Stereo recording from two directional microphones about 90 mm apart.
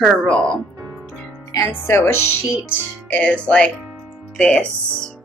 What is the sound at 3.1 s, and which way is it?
Speech, 10° left (ahead or behind).